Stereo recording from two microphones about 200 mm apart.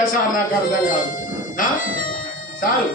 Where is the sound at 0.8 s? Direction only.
40° left (ahead or behind).